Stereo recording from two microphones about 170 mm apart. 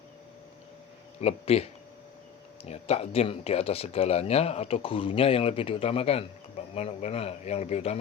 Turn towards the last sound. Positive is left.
turn(degrees=40)  # may be behind; listen again after turning